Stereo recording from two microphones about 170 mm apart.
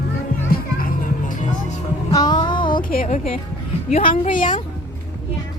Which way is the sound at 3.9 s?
35° left (ahead or behind).